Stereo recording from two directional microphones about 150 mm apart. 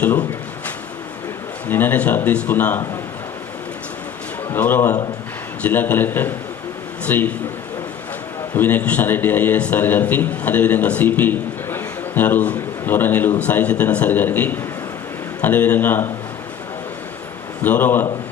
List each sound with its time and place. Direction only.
0.0 s speech: 10° left (ahead or behind)
1.7 s a man's voice: 10° left (ahead or behind)
4.5 s a man's voice: 15° left (ahead or behind)
8.5 s a man's voice: 10° left (ahead or behind)
17.6 s a man's voice: 10° left (ahead or behind)